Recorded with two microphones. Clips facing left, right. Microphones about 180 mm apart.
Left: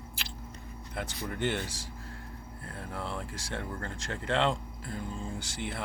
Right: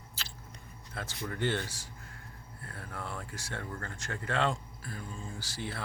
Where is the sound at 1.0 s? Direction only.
20° left (ahead or behind).